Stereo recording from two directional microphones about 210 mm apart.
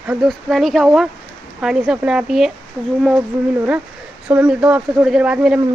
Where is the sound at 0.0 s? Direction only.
Centre (ahead or behind).